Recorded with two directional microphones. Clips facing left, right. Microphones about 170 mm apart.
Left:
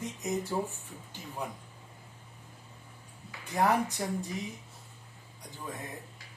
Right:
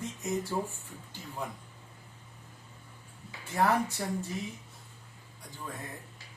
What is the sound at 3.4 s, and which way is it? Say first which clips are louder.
Speech: even; 15° left (ahead or behind).